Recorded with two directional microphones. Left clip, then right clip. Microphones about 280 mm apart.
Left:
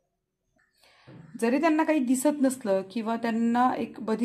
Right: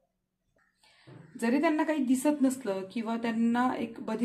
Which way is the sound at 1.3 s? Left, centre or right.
Left.